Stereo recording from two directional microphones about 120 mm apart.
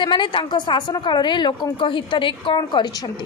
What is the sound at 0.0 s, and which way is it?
A woman's voice, 45° left (ahead or behind).